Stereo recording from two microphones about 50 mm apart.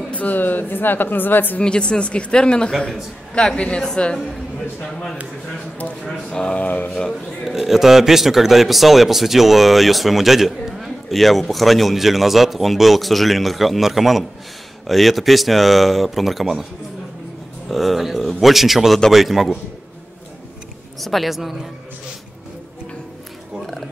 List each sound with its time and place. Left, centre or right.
0.1 s speech: left
1.6 s speech: centre
6.0 s speech: centre
6.4 s speech: left
7.4 s speech: centre
17.6 s bird: centre
18.4 s speech: centre
21.0 s speech: centre